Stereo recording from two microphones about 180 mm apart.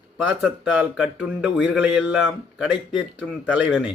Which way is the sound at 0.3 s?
5° right (ahead or behind).